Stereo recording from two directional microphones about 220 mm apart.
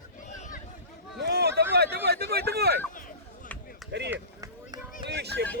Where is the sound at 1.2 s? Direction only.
50° right (ahead or behind).